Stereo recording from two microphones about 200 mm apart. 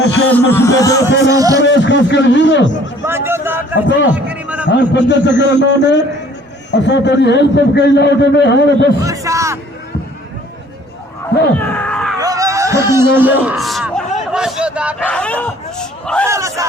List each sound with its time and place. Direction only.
0.0 s speech: 65° left (ahead or behind)
0.3 s speech: 10° left (ahead or behind)
1.3 s speech: 15° right (ahead or behind)
1.6 s a man's voice: 65° left (ahead or behind)
3.1 s a sound: 10° right (ahead or behind)
4.7 s a man's voice: 60° left (ahead or behind)
9.0 s a man's voice: 15° right (ahead or behind)
11.5 s a sound: 10° left (ahead or behind)
12.2 s a sound: 15° right (ahead or behind)
12.9 s a man's voice: 10° right (ahead or behind)
15.0 s speech: 5° left (ahead or behind)
16.2 s speech: 15° right (ahead or behind)